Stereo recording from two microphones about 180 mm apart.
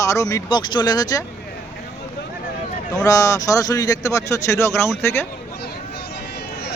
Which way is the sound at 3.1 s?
20° left (ahead or behind).